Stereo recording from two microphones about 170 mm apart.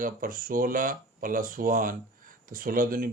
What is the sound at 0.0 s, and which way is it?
Speech, 55° right (ahead or behind).